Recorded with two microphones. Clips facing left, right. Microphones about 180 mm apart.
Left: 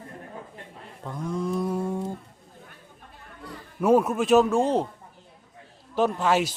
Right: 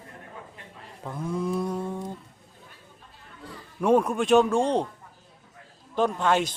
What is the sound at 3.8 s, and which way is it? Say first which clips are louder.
Speech: left 1 dB; 5° left (ahead or behind).